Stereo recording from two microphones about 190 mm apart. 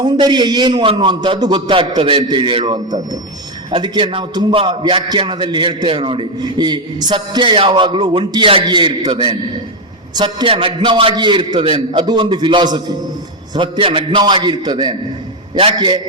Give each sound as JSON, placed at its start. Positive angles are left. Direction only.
{"t": 0.0, "sound": "a man's voice", "side_deg": -20}